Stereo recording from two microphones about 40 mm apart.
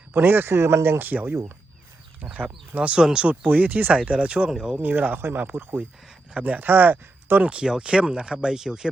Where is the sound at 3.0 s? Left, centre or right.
Centre.